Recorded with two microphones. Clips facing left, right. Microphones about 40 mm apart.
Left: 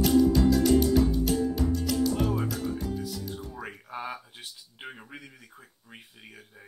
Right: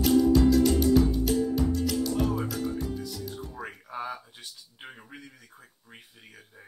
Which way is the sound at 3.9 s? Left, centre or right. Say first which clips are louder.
Right 1 dB; centre.